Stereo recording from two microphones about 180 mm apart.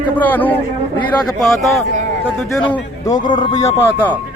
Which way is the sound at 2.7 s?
25° left (ahead or behind).